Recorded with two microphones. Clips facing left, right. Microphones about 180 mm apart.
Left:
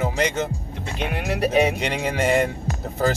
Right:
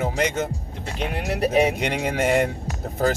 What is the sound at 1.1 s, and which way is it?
Speech, 35° right (ahead or behind).